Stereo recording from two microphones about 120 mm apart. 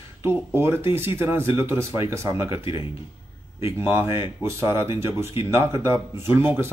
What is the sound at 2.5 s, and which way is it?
Speech, 45° left (ahead or behind).